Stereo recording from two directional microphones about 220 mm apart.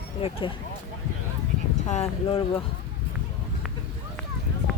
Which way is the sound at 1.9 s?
25° left (ahead or behind).